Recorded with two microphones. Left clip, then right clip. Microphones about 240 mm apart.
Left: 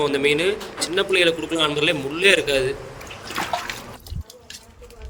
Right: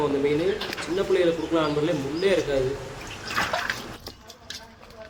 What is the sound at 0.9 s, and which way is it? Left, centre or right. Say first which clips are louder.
A man's voice: left 4 dB; left.